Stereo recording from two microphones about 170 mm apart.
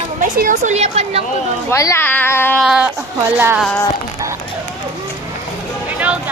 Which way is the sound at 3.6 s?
5° left (ahead or behind).